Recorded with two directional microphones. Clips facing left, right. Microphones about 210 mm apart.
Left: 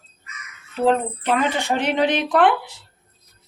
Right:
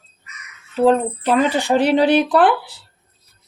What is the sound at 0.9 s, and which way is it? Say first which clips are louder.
Speech: right 3 dB; 35° right (ahead or behind).